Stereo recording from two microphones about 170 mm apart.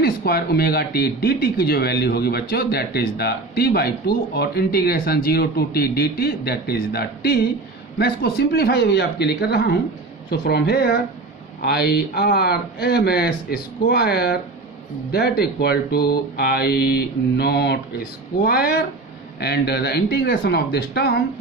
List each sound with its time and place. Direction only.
0.0 s speech: 70° left (ahead or behind)